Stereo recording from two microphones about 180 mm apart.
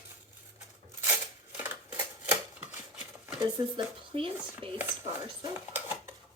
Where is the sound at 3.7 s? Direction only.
30° right (ahead or behind).